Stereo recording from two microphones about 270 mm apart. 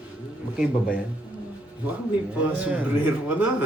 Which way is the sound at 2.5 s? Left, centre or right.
Centre.